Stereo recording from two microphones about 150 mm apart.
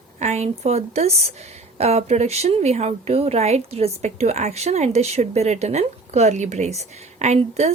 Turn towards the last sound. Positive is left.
turn(degrees=-45)  # may be behind; listen again after turning